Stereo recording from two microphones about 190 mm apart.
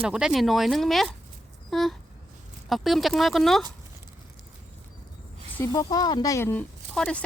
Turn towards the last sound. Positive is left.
turn(degrees=5)  # may be behind; listen again after turning